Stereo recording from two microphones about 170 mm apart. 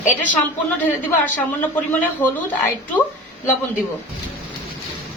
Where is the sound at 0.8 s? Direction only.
10° left (ahead or behind).